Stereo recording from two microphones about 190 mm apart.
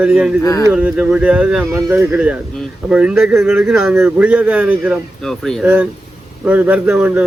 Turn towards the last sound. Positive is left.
turn(degrees=-5)  # may be behind; listen again after turning